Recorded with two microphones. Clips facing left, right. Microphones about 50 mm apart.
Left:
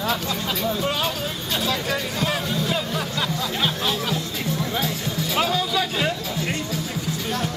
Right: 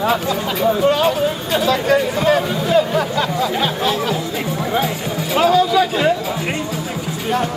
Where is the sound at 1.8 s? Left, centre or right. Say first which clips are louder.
Right 10 dB; right.